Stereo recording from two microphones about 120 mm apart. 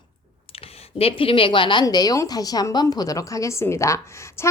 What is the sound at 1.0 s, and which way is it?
Speech, 50° left (ahead or behind).